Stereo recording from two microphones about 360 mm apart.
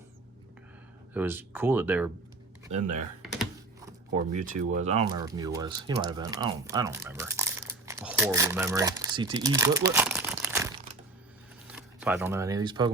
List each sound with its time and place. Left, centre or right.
1.1 s speech: centre
2.7 s speech: centre
4.4 s speech: centre
11.7 s speech: centre